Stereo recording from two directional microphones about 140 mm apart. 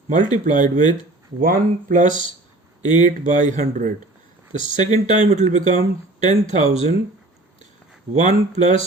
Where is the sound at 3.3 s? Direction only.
60° right (ahead or behind).